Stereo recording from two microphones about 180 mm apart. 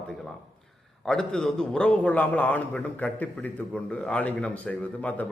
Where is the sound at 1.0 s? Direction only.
5° left (ahead or behind).